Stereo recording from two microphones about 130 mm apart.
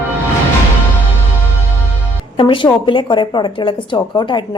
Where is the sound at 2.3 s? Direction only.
40° left (ahead or behind).